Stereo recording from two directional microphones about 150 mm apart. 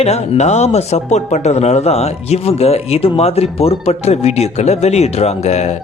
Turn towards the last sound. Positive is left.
turn(degrees=50)  # may be behind; listen again after turning